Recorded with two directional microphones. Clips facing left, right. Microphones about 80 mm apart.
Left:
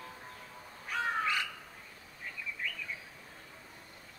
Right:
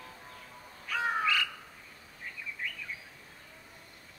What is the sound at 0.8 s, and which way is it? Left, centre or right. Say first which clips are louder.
Crow: right 2 dB; left.